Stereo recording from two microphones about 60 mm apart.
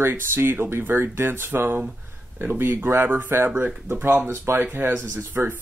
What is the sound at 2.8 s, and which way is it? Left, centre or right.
Speech, right.